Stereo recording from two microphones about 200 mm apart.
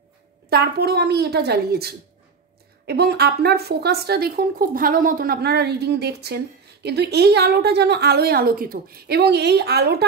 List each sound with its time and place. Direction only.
0.5 s speech: 50° right (ahead or behind)